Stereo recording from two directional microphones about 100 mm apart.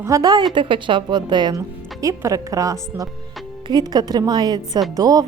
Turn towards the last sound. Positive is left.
turn(degrees=-40)  # may be behind; listen again after turning